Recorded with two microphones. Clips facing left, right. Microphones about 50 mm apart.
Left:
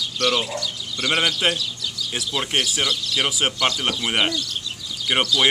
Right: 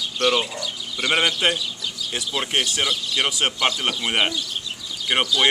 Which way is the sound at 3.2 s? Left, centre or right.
Centre.